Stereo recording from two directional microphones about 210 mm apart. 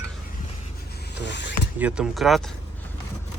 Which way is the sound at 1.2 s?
55° left (ahead or behind).